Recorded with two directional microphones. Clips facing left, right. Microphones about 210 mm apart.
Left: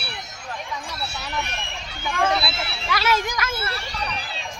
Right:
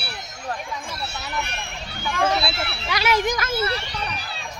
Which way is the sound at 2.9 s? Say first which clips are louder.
Right 2 dB; 15° right (ahead or behind).